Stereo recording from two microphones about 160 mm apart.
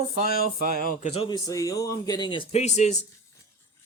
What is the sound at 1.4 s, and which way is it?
Speech, 20° left (ahead or behind).